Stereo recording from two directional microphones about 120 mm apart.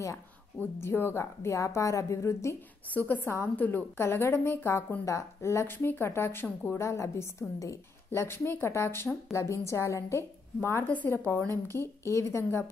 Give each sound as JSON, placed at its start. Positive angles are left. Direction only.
{"t": 0.6, "sound": "a woman's voice", "side_deg": 20}